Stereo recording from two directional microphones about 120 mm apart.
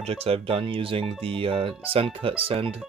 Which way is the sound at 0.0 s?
55° right (ahead or behind).